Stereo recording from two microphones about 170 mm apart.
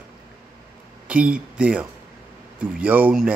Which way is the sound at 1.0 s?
5° right (ahead or behind).